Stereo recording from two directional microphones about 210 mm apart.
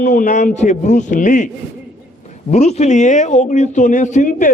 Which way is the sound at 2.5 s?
30° left (ahead or behind).